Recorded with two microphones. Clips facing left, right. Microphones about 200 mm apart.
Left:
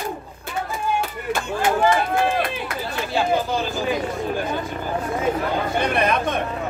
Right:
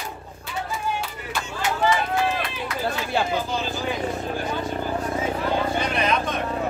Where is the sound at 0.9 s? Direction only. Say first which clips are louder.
Left 6 dB; 50° left (ahead or behind).